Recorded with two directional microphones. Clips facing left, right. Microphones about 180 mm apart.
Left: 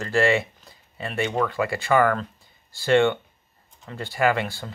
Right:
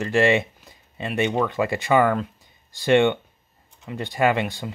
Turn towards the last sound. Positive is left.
turn(degrees=-20)  # may be behind; listen again after turning